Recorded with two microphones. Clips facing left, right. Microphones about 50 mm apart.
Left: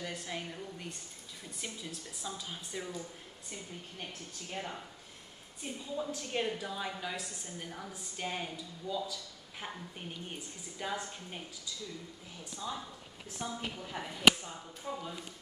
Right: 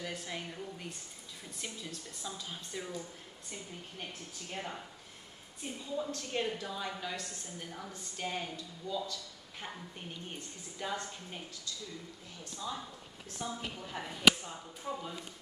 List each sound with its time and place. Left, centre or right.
0.0 s a woman's voice: centre
5.9 s a woman's voice: centre
13.9 s a woman's voice: centre